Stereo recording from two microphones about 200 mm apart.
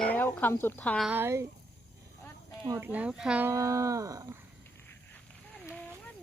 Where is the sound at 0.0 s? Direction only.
10° left (ahead or behind).